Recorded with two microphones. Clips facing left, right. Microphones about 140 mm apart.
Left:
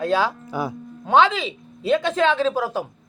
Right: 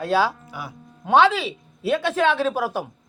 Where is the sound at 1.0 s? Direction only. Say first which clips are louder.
Even; 5° right (ahead or behind).